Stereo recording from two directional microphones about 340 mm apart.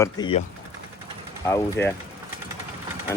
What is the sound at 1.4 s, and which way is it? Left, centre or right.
Speech, centre.